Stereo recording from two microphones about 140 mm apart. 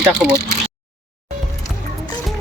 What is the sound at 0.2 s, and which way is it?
Speech, 5° right (ahead or behind).